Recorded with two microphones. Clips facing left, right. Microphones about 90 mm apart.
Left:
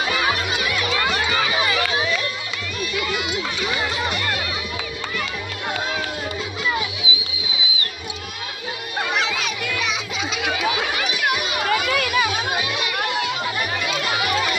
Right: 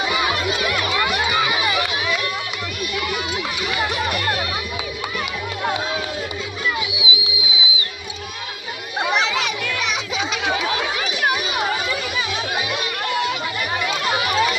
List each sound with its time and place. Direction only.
1.2 s crowd: 15° right (ahead or behind)
6.9 s music: 15° right (ahead or behind)
9.4 s children playing: 65° right (ahead or behind)
11.7 s music: 65° left (ahead or behind)